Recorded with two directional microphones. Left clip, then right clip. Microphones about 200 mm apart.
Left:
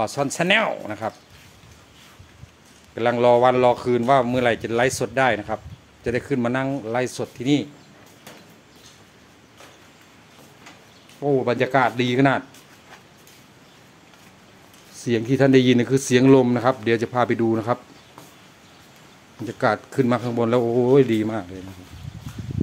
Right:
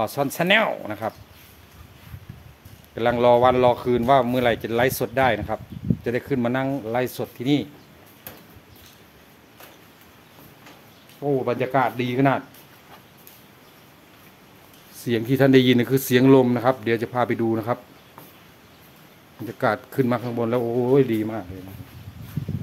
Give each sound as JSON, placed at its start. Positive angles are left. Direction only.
{"t": 0.0, "sound": "speech", "side_deg": 0}
{"t": 3.0, "sound": "speech", "side_deg": 0}
{"t": 11.2, "sound": "speech", "side_deg": 15}
{"t": 15.0, "sound": "speech", "side_deg": 5}
{"t": 19.4, "sound": "speech", "side_deg": 5}